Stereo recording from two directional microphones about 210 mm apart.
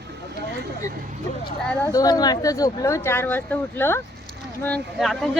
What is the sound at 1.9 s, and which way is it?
Speech, 15° left (ahead or behind).